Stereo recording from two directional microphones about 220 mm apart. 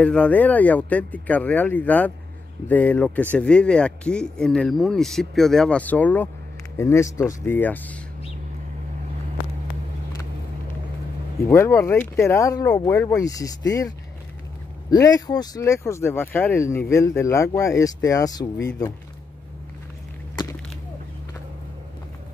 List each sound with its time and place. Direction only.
0.0 s speech: 5° left (ahead or behind)
11.4 s speech: 10° left (ahead or behind)
14.9 s speech: 15° left (ahead or behind)